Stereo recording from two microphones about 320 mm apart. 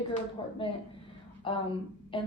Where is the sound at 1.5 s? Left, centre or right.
Centre.